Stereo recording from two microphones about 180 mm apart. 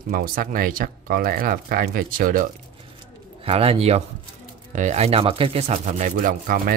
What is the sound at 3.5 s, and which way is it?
Speech, 35° right (ahead or behind).